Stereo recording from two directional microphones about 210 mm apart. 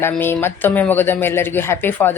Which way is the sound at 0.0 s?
10° left (ahead or behind).